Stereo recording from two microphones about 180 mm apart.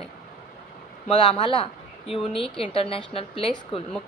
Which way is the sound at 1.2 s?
30° left (ahead or behind).